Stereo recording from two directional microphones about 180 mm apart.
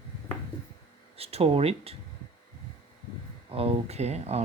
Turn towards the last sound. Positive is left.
turn(degrees=-35)  # may be behind; listen again after turning